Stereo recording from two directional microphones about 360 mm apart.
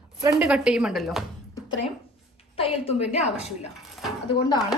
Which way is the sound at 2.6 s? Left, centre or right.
Centre.